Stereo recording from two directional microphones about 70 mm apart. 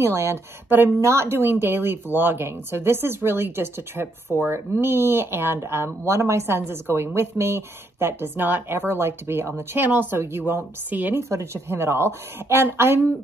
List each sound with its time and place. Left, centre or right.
0.0 s speech: right
10.9 s a woman's voice: right
11.1 s speech: right